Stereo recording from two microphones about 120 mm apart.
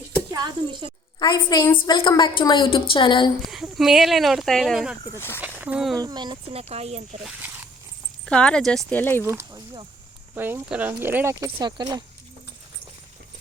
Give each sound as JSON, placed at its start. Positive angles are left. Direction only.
{"t": 0.3, "sound": "speech", "side_deg": -35}
{"t": 1.2, "sound": "a woman's voice", "side_deg": 40}
{"t": 3.4, "sound": "speech", "side_deg": 0}
{"t": 5.4, "sound": "a sound", "side_deg": -15}
{"t": 6.0, "sound": "speech", "side_deg": -35}
{"t": 6.5, "sound": "speech", "side_deg": -60}
{"t": 8.3, "sound": "speech", "side_deg": 10}
{"t": 8.9, "sound": "speech", "side_deg": 15}
{"t": 9.2, "sound": "speech", "side_deg": -20}
{"t": 11.6, "sound": "speech", "side_deg": -35}